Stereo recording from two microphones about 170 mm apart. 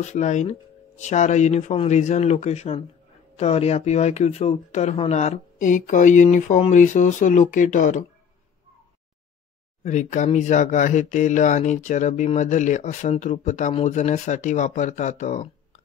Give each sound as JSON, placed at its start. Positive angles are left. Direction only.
{"t": 0.0, "sound": "speech", "side_deg": 45}
{"t": 9.8, "sound": "speech", "side_deg": 45}